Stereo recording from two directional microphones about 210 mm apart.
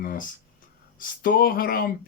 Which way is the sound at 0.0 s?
40° left (ahead or behind).